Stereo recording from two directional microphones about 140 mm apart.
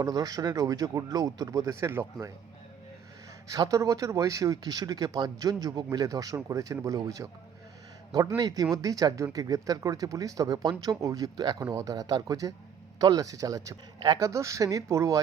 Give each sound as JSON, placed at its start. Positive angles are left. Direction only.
{"t": 0.0, "sound": "speech", "side_deg": -25}
{"t": 3.5, "sound": "speech", "side_deg": -25}
{"t": 8.4, "sound": "speech", "side_deg": -30}